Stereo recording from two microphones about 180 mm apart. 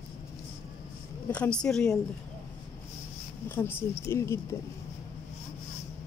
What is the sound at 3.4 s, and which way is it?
Speech, 10° left (ahead or behind).